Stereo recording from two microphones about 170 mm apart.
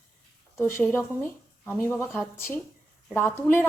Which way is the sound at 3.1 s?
10° left (ahead or behind).